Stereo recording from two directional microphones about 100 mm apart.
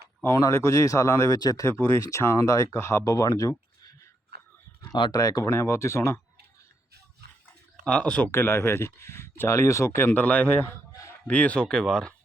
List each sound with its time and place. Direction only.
0.3 s speech: 35° left (ahead or behind)
4.9 s speech: 50° left (ahead or behind)
5.1 s speech: 35° left (ahead or behind)
7.9 s speech: 10° left (ahead or behind)
8.3 s a man's voice: 25° left (ahead or behind)
11.3 s speech: 15° left (ahead or behind)